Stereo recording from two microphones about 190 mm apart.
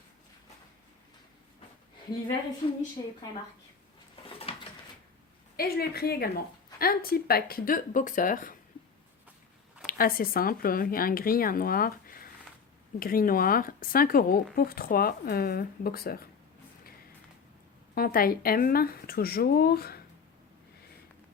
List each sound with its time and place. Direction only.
2.6 s a woman's voice: 25° left (ahead or behind)
4.5 s a sound: 30° left (ahead or behind)
5.5 s a woman's voice: 50° left (ahead or behind)
9.8 s speech: 50° left (ahead or behind)
17.9 s speech: 50° left (ahead or behind)